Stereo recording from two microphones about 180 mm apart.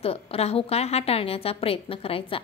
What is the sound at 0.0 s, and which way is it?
A woman's voice, 35° left (ahead or behind).